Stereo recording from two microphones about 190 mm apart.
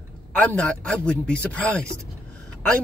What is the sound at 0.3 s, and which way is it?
Speech, 5° left (ahead or behind).